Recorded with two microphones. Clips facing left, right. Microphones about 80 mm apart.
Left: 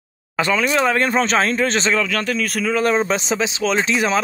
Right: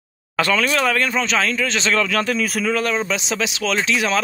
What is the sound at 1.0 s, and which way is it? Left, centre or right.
Speech, left.